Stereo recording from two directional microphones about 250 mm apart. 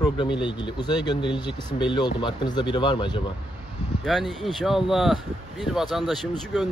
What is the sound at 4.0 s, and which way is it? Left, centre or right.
Speech, centre.